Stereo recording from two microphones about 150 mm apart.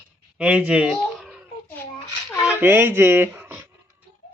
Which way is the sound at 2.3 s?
20° left (ahead or behind).